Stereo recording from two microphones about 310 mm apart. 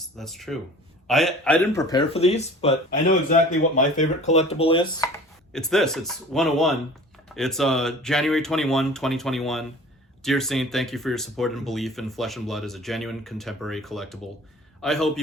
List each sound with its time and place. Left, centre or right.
0.2 s speech: centre
5.5 s speech: centre